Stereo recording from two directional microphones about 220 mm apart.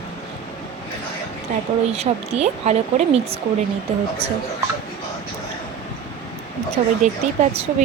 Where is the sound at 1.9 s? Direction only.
30° right (ahead or behind).